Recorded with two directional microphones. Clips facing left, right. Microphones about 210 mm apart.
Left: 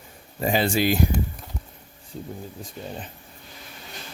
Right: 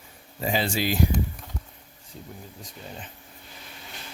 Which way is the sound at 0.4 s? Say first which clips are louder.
Left 4 dB; 55° left (ahead or behind).